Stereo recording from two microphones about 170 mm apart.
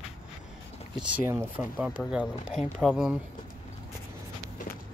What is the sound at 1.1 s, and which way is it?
Speech, 15° right (ahead or behind).